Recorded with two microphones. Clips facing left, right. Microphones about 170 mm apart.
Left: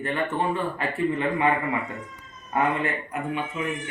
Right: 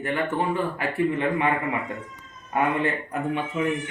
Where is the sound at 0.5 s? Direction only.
10° right (ahead or behind).